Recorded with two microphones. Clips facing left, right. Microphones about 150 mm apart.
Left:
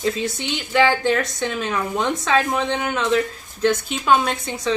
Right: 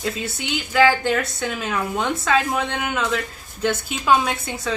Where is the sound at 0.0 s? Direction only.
5° right (ahead or behind).